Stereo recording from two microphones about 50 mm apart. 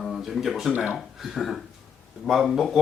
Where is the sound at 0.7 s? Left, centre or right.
Right.